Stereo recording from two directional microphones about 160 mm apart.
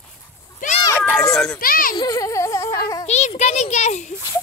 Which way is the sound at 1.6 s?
65° left (ahead or behind).